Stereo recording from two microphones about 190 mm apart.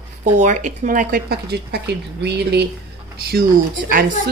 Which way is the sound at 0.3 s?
40° right (ahead or behind).